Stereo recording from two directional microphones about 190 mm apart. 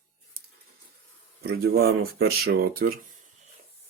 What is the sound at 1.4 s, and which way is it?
Speech, 55° right (ahead or behind).